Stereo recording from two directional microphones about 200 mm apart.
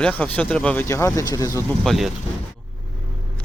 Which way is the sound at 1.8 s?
Centre (ahead or behind).